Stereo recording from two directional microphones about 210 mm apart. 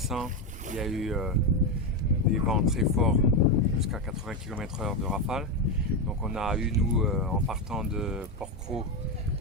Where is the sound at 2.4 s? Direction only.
Centre (ahead or behind).